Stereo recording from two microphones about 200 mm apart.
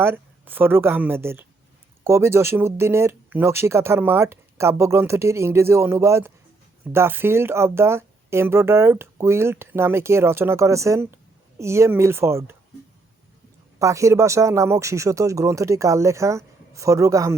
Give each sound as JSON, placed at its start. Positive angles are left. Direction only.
{"t": 0.0, "sound": "speech", "side_deg": -10}
{"t": 13.7, "sound": "speech", "side_deg": -15}